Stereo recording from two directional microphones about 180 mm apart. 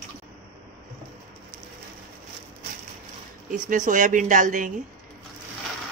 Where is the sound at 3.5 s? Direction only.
45° right (ahead or behind).